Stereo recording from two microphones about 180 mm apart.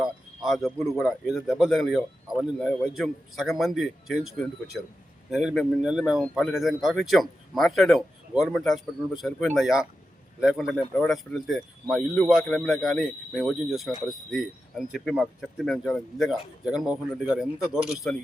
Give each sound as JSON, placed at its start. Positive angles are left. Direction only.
{"t": 0.0, "sound": "speech", "side_deg": 0}